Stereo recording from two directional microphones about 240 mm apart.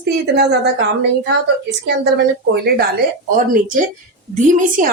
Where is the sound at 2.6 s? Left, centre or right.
Right.